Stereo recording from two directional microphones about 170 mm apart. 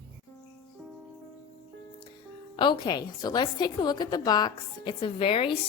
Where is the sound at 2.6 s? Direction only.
30° left (ahead or behind).